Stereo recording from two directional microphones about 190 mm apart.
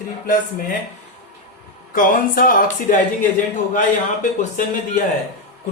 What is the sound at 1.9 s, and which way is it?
Speech, 45° left (ahead or behind).